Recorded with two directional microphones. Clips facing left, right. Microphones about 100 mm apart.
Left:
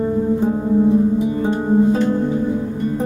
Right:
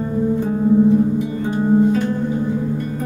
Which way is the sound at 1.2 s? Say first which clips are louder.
Left 1 dB; 25° left (ahead or behind).